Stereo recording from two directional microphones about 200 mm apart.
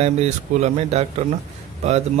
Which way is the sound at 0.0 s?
35° right (ahead or behind).